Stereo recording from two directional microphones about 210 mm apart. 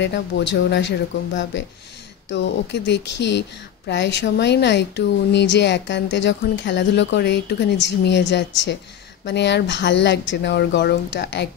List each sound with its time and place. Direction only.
0.0 s a woman's voice: 55° left (ahead or behind)